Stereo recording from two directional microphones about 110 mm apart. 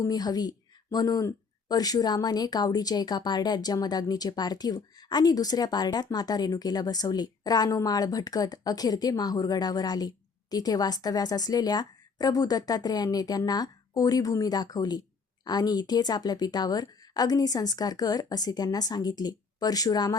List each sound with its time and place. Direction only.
0.0 s speech: 35° left (ahead or behind)